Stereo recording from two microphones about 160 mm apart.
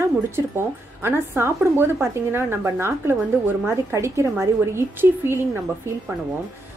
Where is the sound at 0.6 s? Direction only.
15° right (ahead or behind).